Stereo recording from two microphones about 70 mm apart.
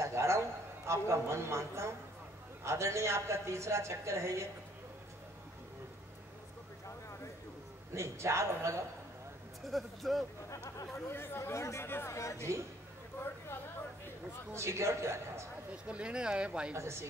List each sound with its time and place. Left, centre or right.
0.0 s a sound: right
0.8 s a woman's voice: right
7.9 s a woman's voice: right
9.7 s speech: centre
11.1 s speech: left
12.1 s speech: left
14.5 s a woman's voice: right
15.7 s speech: centre
16.7 s a woman's voice: right